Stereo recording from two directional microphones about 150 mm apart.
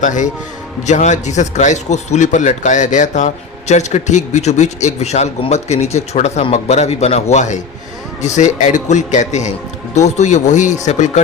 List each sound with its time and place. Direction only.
0.0 s a man's voice: 55° left (ahead or behind)